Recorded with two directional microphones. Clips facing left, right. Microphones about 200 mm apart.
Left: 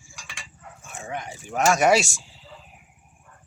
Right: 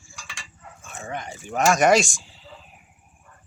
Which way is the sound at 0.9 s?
10° left (ahead or behind).